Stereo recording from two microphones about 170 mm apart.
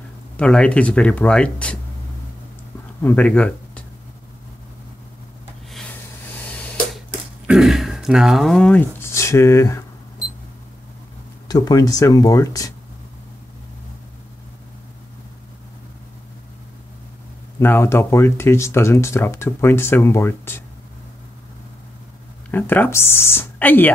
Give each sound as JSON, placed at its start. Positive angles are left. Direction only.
{"t": 0.4, "sound": "speech", "side_deg": 5}
{"t": 3.0, "sound": "speech", "side_deg": 10}
{"t": 5.7, "sound": "a sound", "side_deg": 5}
{"t": 7.4, "sound": "speech", "side_deg": -5}
{"t": 11.4, "sound": "speech", "side_deg": 25}
{"t": 17.6, "sound": "speech", "side_deg": 15}
{"t": 22.5, "sound": "speech", "side_deg": 10}